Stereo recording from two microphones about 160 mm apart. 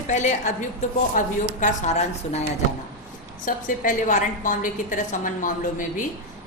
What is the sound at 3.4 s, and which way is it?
A woman's voice, 55° left (ahead or behind).